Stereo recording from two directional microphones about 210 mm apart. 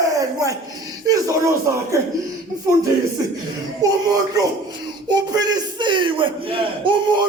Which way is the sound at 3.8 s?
15° right (ahead or behind).